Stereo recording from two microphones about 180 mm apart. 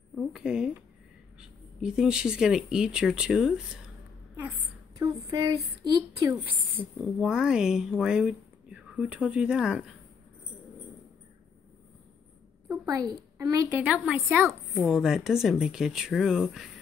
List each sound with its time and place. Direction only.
0.1 s a woman's voice: centre (ahead or behind)
4.9 s speech: 20° right (ahead or behind)
7.2 s a woman's voice: 5° right (ahead or behind)
13.4 s a woman's voice: 20° right (ahead or behind)
13.7 s a woman's voice: 5° right (ahead or behind)